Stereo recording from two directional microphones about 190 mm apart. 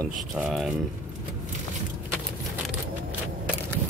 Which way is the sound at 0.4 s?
Centre (ahead or behind).